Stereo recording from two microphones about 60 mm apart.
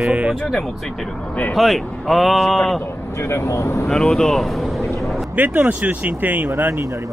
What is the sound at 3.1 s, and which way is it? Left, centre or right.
Speech, left.